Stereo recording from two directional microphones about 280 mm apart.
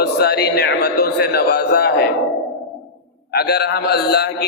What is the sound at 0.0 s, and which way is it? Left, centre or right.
A man's voice, left.